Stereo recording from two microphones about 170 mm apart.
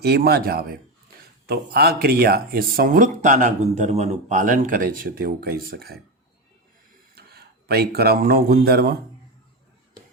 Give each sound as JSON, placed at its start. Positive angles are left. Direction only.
{"t": 0.0, "sound": "speech", "side_deg": -70}
{"t": 7.2, "sound": "speech", "side_deg": -65}